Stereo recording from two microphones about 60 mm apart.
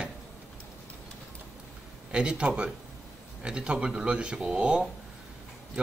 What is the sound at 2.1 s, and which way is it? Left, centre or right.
A man's voice, centre.